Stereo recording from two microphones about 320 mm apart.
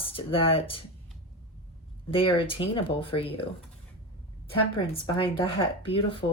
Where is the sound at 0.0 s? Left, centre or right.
Centre.